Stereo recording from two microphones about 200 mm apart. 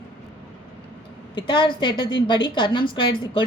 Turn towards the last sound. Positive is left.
turn(degrees=25)  # may be behind; listen again after turning